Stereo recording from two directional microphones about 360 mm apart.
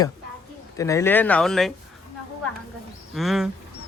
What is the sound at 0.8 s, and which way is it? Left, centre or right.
Speech, centre.